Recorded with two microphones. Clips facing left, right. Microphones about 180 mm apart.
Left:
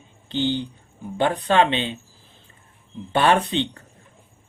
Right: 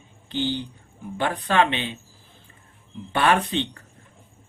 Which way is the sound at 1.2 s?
30° left (ahead or behind).